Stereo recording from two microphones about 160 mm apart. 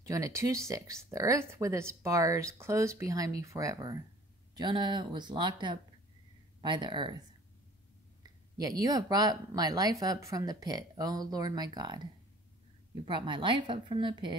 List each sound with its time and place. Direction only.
0.0 s speech: 20° right (ahead or behind)